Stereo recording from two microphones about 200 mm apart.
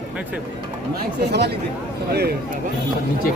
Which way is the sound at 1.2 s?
55° right (ahead or behind).